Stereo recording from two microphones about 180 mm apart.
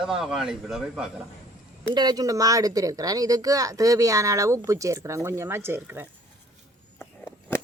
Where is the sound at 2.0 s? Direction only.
20° right (ahead or behind).